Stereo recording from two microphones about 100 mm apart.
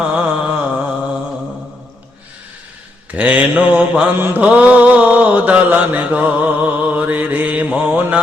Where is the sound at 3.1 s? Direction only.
15° right (ahead or behind).